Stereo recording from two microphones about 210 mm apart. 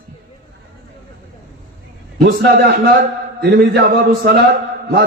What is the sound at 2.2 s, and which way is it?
A man's voice, 55° right (ahead or behind).